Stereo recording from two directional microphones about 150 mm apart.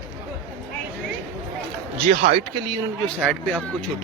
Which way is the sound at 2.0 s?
40° right (ahead or behind).